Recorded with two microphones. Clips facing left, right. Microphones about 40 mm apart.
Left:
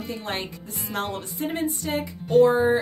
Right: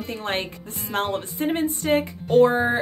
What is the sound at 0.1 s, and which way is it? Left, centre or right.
Speech, right.